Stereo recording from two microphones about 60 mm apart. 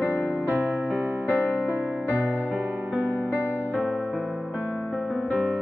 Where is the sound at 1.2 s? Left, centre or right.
Left.